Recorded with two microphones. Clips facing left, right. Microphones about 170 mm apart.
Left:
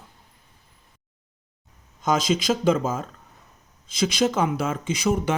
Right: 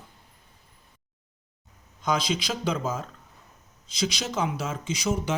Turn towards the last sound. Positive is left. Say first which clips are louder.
# left 5 dB
turn(degrees=55)  # may be behind; listen again after turning